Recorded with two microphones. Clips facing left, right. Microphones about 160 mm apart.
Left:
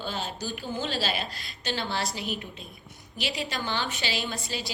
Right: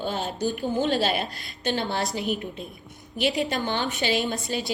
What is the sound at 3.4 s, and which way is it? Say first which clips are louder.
Speech: right 5 dB; 55° right (ahead or behind).